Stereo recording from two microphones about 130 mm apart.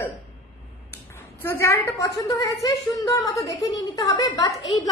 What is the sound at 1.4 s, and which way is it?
A woman's voice, 15° left (ahead or behind).